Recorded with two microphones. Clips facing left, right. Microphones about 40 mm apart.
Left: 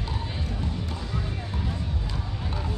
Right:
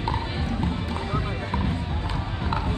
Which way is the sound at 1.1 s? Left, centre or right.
Right.